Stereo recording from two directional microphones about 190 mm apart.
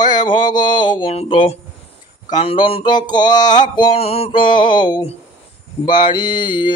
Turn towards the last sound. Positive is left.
turn(degrees=25)  # may be behind; listen again after turning